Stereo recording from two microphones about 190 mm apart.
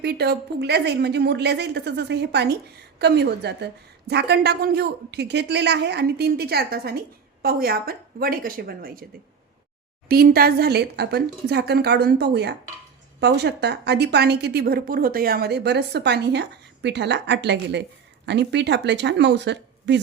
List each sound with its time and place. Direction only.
0.0 s a woman's voice: 55° right (ahead or behind)
10.1 s a woman's voice: 55° right (ahead or behind)